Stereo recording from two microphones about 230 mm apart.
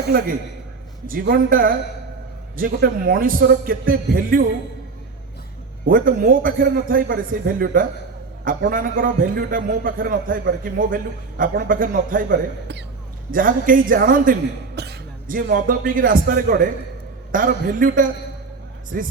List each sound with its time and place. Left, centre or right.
1.0 s a man's voice: right
5.9 s a man's voice: right